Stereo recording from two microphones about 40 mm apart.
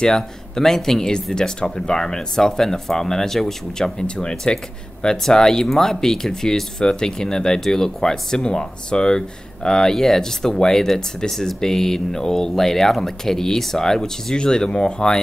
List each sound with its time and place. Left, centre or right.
0.0 s speech: centre
14.3 s speech: left